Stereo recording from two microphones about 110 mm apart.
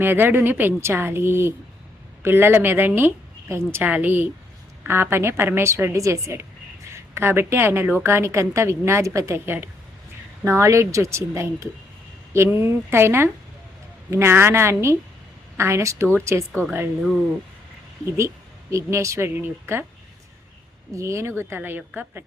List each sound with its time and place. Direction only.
0.0 s a woman's voice: 20° right (ahead or behind)
18.7 s a woman's voice: 25° right (ahead or behind)
20.9 s a woman's voice: 25° right (ahead or behind)